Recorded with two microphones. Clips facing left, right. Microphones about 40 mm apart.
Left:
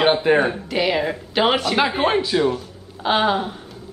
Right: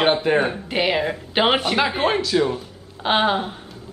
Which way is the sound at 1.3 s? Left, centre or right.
Right.